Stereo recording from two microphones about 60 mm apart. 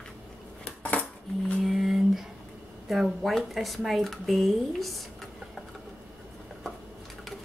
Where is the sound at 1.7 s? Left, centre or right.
Centre.